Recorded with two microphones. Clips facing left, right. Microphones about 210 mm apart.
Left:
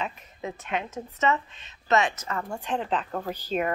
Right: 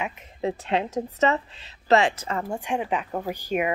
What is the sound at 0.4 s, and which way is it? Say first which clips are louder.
A woman's voice: right 6 dB; 30° right (ahead or behind).